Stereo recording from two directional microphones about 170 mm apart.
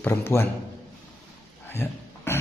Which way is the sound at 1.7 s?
15° left (ahead or behind).